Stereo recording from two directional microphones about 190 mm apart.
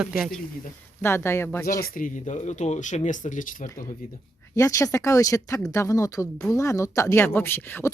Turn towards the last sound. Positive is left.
turn(degrees=10)  # may be behind; listen again after turning